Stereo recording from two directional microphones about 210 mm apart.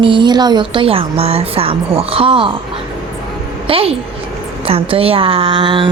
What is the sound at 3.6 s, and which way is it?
A woman's voice, 25° right (ahead or behind).